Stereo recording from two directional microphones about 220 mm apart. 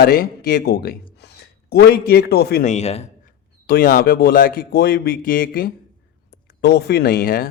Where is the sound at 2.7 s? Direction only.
30° left (ahead or behind).